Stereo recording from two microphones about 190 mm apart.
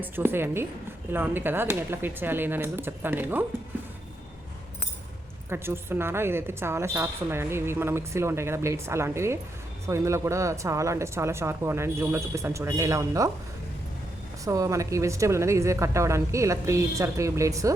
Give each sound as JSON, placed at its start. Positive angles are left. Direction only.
{"t": 0.0, "sound": "a woman's voice", "side_deg": -10}
{"t": 5.5, "sound": "a woman's voice", "side_deg": -10}
{"t": 14.4, "sound": "a woman's voice", "side_deg": -15}